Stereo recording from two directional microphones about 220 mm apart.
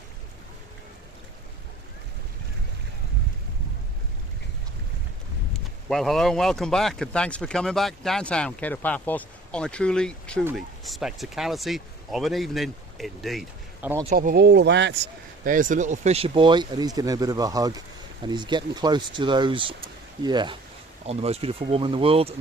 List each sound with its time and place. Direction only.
5.5 s speech: centre (ahead or behind)
13.8 s speech: 10° right (ahead or behind)
14.1 s speech: 45° right (ahead or behind)
15.4 s speech: 35° right (ahead or behind)